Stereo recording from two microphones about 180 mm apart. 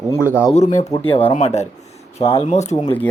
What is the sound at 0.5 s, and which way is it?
Speech, 40° left (ahead or behind).